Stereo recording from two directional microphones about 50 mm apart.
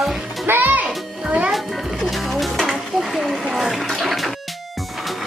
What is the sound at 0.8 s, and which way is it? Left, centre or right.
Music, right.